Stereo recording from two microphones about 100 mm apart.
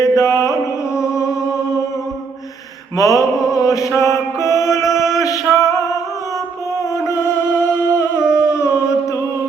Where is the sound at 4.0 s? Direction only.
30° left (ahead or behind).